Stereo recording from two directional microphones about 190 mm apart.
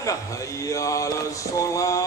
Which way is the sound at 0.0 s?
15° left (ahead or behind).